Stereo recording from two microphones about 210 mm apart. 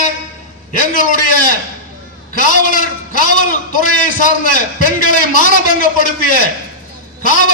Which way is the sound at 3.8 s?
40° left (ahead or behind).